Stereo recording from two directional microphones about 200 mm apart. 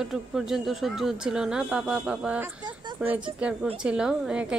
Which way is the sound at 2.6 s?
20° right (ahead or behind).